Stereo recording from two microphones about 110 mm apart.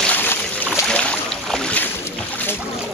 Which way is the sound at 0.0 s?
15° left (ahead or behind).